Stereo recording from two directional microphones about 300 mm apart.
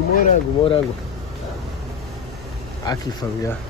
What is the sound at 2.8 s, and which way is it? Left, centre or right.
Speech, centre.